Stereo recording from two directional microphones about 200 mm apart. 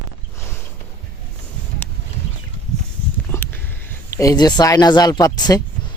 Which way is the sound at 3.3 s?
10° left (ahead or behind).